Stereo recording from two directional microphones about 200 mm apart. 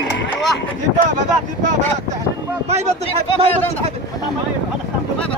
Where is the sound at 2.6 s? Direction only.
35° right (ahead or behind).